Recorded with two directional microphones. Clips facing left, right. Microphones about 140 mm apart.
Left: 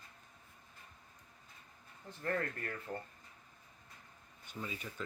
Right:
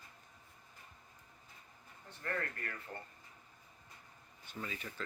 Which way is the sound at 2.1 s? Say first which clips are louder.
Left 4 dB; 30° left (ahead or behind).